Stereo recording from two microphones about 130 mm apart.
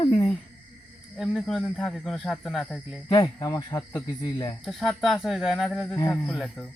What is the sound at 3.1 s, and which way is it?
Speech, 30° left (ahead or behind).